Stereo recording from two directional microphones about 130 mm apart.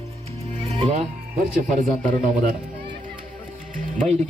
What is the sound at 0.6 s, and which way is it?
Music, 50° right (ahead or behind).